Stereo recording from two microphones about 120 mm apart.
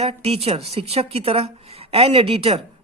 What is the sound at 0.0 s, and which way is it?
A man's voice, 60° right (ahead or behind).